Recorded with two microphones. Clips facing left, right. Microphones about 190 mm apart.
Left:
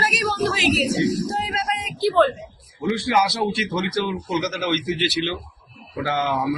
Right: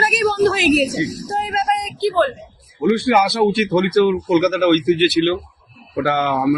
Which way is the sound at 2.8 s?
60° right (ahead or behind).